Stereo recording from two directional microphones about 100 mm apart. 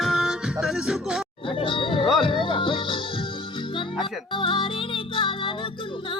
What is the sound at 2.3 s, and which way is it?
Music, 55° left (ahead or behind).